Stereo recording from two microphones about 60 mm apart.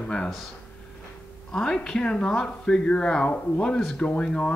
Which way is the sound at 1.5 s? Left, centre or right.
Centre.